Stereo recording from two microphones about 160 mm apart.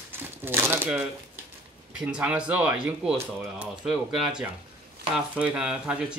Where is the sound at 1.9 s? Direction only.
5° right (ahead or behind).